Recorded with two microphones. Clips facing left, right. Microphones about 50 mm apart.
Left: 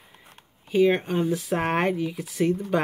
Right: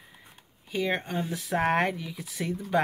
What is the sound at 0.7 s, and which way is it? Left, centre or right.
Speech, centre.